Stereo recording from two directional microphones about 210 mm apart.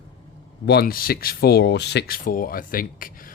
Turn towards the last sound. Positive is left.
turn(degrees=40)  # may be behind; listen again after turning